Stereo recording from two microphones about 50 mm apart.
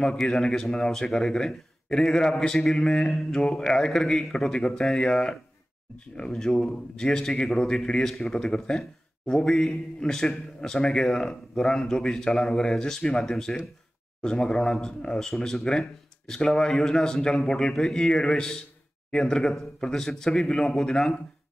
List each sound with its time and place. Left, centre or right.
0.3 s a man's voice: centre